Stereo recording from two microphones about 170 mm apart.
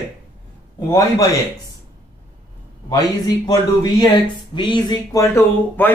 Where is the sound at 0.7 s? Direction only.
20° left (ahead or behind).